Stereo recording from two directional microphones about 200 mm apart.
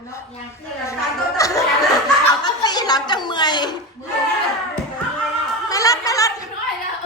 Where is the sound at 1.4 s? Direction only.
15° left (ahead or behind).